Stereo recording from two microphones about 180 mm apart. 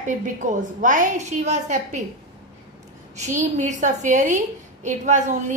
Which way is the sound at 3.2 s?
45° right (ahead or behind).